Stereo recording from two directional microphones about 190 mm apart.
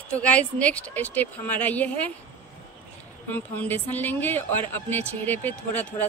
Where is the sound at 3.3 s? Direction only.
10° left (ahead or behind).